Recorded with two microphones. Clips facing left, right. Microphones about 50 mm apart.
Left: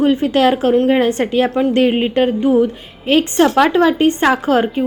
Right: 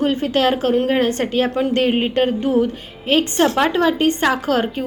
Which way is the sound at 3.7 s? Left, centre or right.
Left.